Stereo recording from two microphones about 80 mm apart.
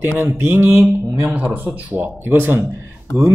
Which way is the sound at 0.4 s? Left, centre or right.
Right.